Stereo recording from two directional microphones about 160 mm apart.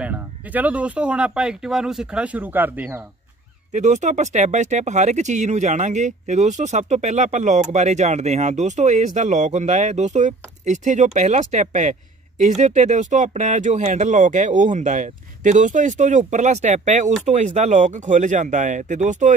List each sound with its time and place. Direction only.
0.0 s speech: 10° right (ahead or behind)
3.7 s speech: 50° right (ahead or behind)